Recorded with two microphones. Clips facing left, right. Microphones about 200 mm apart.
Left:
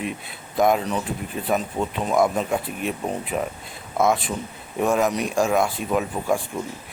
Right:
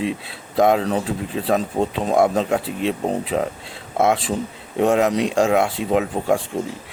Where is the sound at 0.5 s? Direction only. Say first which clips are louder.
Right 3 dB; 90° right.